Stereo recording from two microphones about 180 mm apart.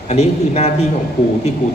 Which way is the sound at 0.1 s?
40° left (ahead or behind).